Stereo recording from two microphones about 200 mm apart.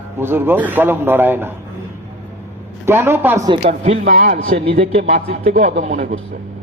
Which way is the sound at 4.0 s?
45° right (ahead or behind).